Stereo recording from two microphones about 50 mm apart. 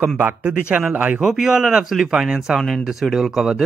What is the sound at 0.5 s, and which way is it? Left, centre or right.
Speech, right.